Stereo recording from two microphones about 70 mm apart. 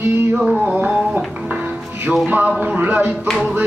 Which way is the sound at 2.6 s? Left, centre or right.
Right.